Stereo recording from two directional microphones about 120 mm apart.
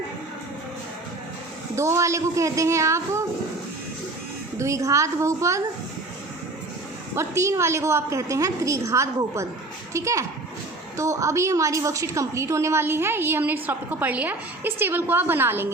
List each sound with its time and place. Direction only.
1.7 s a woman's voice: 25° right (ahead or behind)
4.5 s a woman's voice: 25° right (ahead or behind)
7.2 s a woman's voice: 25° right (ahead or behind)